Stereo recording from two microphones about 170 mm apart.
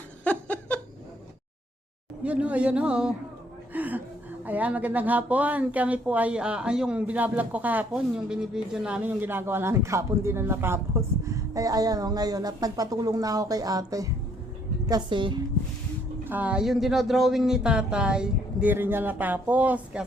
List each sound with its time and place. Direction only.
0.3 s laughter: 10° left (ahead or behind)
2.2 s a woman's voice: 10° right (ahead or behind); by 15.4 s 30° right (ahead or behind)
16.2 s speech: 10° right (ahead or behind)